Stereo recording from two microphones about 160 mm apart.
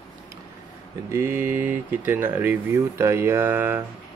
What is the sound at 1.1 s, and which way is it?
Speech, 15° right (ahead or behind).